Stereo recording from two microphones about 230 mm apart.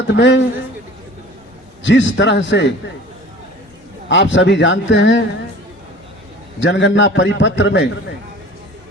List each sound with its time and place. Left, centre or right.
0.1 s a man's voice: left
1.8 s a man's voice: left
4.1 s a man's voice: left
6.6 s a man's voice: left